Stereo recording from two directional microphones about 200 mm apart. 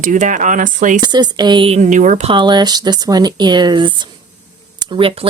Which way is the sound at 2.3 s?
25° right (ahead or behind).